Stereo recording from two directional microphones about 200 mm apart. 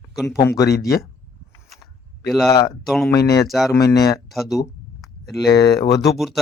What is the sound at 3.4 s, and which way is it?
Speech, centre (ahead or behind).